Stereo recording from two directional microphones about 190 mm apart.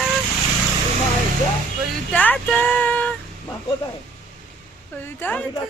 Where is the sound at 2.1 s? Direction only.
10° left (ahead or behind).